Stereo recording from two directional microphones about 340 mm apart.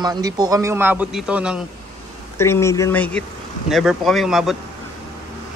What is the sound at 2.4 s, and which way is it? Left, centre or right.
Speech, centre.